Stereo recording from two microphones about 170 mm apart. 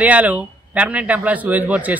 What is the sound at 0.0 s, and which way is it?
Speech, 10° right (ahead or behind).